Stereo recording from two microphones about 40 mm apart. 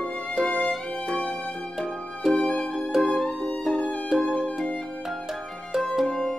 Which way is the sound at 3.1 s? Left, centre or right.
Left.